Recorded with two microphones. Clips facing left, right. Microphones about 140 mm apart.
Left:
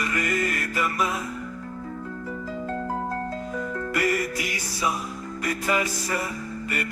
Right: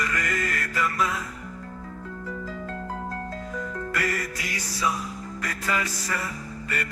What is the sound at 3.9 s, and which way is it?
Music, 15° left (ahead or behind).